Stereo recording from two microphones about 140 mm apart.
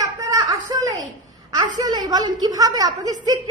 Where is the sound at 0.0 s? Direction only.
25° right (ahead or behind).